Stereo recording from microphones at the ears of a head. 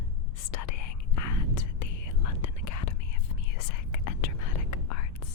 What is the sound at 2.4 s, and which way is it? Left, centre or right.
Whispering, left.